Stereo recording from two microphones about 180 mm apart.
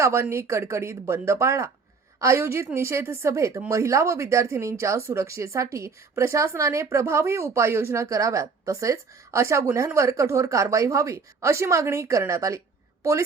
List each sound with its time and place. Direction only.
0.0 s a woman's voice: 15° right (ahead or behind)